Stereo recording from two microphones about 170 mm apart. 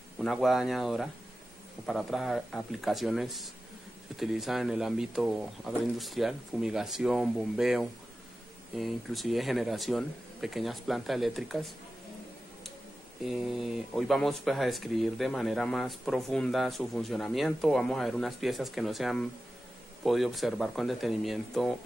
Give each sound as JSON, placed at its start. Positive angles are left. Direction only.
{"t": 0.2, "sound": "speech", "side_deg": 0}
{"t": 13.2, "sound": "speech", "side_deg": 0}